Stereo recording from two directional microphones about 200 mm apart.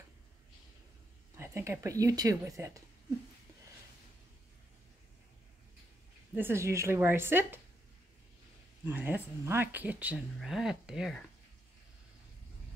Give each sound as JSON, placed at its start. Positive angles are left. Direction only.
{"t": 1.3, "sound": "a woman's voice", "side_deg": -15}
{"t": 6.3, "sound": "speech", "side_deg": -10}
{"t": 8.8, "sound": "speech", "side_deg": -10}